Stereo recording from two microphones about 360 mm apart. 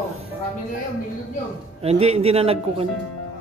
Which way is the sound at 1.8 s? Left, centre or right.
Centre.